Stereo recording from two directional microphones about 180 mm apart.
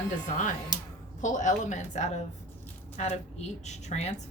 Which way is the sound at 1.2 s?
45° left (ahead or behind).